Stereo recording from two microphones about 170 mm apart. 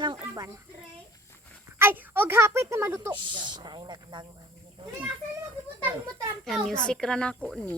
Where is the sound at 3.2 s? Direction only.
25° right (ahead or behind).